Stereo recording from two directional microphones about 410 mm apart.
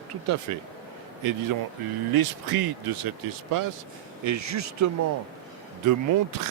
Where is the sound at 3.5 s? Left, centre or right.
Right.